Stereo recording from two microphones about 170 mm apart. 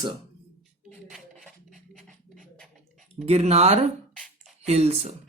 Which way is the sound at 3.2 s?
40° right (ahead or behind).